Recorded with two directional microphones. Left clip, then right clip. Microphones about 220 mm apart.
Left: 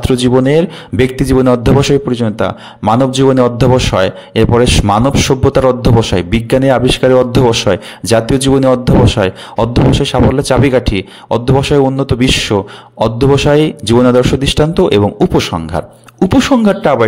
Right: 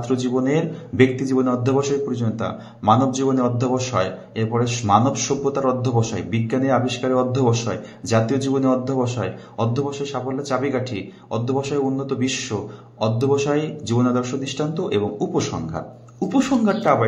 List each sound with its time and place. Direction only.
0.0 s a man's voice: 45° left (ahead or behind)